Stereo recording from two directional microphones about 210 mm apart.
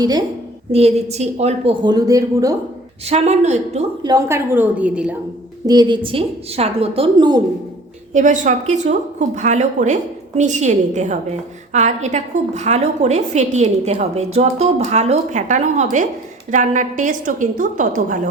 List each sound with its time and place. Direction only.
0.0 s a woman's voice: 20° right (ahead or behind)
0.7 s a woman's voice: 30° right (ahead or behind)
3.1 s a woman's voice: 30° right (ahead or behind)
4.0 s a woman's voice: 15° right (ahead or behind)
5.6 s a woman's voice: 20° right (ahead or behind)
8.1 s a woman's voice: 35° right (ahead or behind)